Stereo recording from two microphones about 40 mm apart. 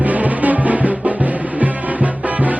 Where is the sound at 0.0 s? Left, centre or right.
Right.